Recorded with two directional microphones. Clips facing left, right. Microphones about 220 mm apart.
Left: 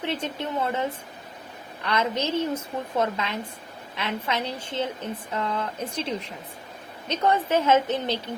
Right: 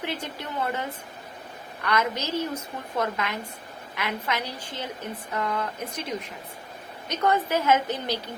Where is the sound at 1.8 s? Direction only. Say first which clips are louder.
Left 1 dB; 25° left (ahead or behind).